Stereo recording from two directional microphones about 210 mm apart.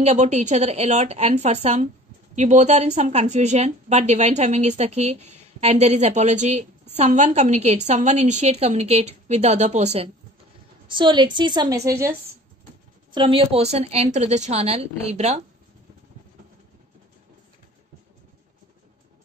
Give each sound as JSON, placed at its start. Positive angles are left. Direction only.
{"t": 0.0, "sound": "a woman's voice", "side_deg": -30}
{"t": 13.1, "sound": "a woman's voice", "side_deg": -25}